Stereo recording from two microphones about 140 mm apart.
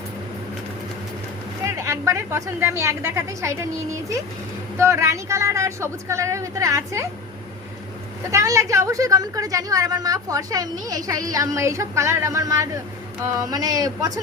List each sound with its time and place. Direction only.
1.6 s a woman's voice: 20° right (ahead or behind)
4.8 s a woman's voice: 20° right (ahead or behind)
8.3 s a woman's voice: 20° right (ahead or behind)